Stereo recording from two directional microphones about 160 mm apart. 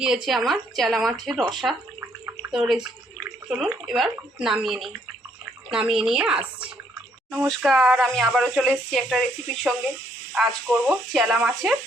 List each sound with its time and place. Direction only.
0.0 s speech: 5° right (ahead or behind)
2.0 s a sound: 15° right (ahead or behind)
2.5 s speech: centre (ahead or behind)
10.3 s speech: 5° right (ahead or behind)